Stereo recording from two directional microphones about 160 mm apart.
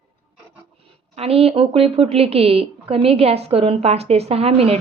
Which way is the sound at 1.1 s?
40° right (ahead or behind).